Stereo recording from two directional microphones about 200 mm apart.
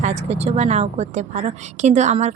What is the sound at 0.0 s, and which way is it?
A woman's voice, 35° right (ahead or behind).